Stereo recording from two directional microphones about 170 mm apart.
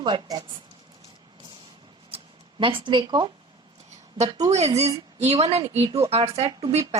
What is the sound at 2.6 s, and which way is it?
Speech, 30° right (ahead or behind).